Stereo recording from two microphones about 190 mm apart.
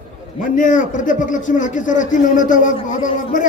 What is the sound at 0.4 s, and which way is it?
A man's voice, 45° left (ahead or behind).